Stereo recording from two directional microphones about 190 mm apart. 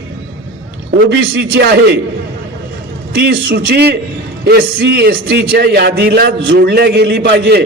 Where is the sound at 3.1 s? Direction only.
60° right (ahead or behind).